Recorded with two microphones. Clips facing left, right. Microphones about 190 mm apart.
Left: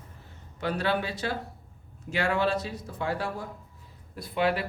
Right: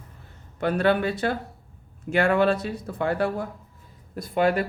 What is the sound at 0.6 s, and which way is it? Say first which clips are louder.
Speech: right 6 dB; 55° right (ahead or behind).